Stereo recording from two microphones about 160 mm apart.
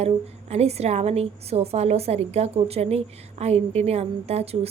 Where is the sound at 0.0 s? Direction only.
40° right (ahead or behind).